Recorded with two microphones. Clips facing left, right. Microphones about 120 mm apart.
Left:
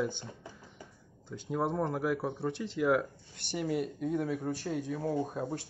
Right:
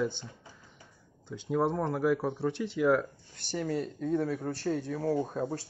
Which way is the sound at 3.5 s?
10° left (ahead or behind).